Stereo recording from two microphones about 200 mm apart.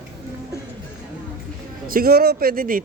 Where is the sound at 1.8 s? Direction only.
45° right (ahead or behind).